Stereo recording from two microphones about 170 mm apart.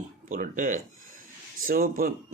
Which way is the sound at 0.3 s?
50° right (ahead or behind).